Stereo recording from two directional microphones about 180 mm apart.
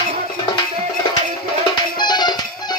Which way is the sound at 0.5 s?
25° left (ahead or behind).